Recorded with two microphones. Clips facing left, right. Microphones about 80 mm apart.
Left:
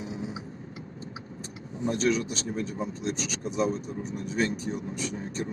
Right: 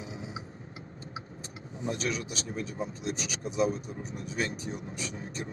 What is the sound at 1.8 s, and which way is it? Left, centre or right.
Speech, left.